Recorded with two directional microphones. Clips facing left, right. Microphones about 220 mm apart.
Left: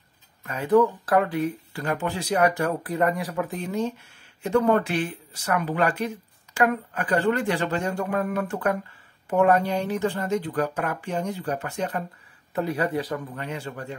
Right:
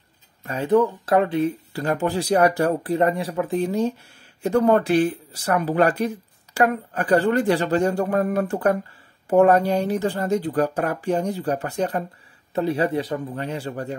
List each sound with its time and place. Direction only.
0.5 s speech: 25° right (ahead or behind)